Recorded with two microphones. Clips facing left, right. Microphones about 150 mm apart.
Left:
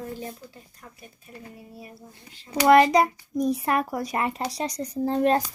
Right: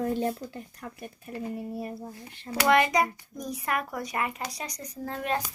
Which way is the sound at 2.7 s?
30° left (ahead or behind).